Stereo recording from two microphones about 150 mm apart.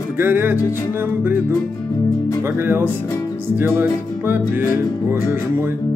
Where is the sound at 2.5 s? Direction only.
15° right (ahead or behind).